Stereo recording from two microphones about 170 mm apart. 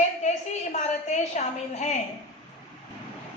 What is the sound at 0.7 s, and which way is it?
A woman's voice, 45° left (ahead or behind).